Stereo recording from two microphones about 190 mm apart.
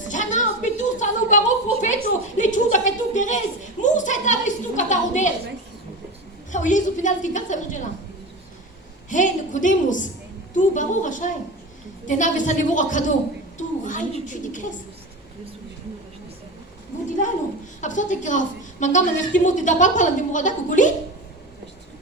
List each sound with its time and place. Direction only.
0.0 s a woman's voice: 40° left (ahead or behind)
6.5 s a woman's voice: 40° left (ahead or behind)
9.0 s a woman's voice: 40° left (ahead or behind)
13.6 s a sound: 40° left (ahead or behind)
17.7 s a woman's voice: 40° left (ahead or behind)